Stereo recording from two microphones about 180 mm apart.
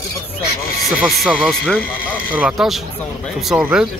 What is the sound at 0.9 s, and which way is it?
Speech, centre (ahead or behind).